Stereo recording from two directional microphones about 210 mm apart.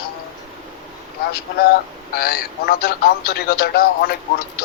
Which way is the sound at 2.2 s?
45° left (ahead or behind).